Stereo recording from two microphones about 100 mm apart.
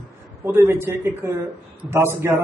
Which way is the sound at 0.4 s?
25° right (ahead or behind).